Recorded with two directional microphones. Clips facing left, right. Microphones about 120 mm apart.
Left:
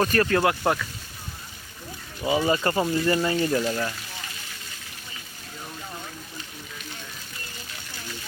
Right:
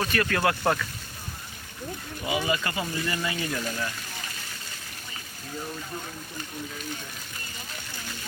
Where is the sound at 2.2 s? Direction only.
35° left (ahead or behind).